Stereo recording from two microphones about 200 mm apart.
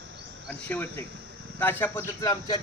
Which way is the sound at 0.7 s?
10° left (ahead or behind).